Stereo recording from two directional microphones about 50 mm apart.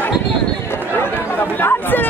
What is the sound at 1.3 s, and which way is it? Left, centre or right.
Speech, left.